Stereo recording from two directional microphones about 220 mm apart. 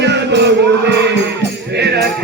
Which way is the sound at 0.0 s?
50° right (ahead or behind).